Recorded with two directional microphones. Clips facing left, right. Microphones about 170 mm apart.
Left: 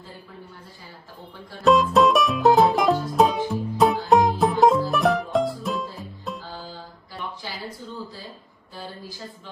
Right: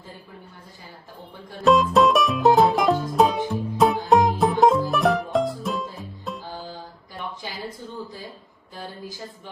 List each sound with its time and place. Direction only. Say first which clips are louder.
1.6 s music: even; centre (ahead or behind)
6.4 s music: right 2 dB; 15° right (ahead or behind)